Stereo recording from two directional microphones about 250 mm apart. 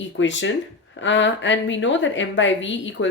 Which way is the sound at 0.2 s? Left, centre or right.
Left.